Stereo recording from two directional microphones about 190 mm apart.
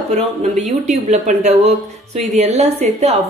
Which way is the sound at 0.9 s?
35° right (ahead or behind).